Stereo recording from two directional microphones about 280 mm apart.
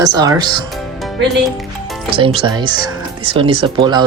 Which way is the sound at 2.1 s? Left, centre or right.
Centre.